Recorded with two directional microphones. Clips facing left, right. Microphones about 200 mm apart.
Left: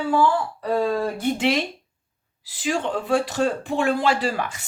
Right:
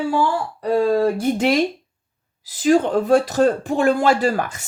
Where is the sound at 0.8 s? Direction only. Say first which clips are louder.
Right 8 dB; 40° right (ahead or behind).